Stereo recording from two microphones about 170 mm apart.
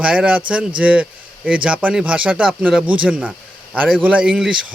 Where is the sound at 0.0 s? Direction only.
5° right (ahead or behind).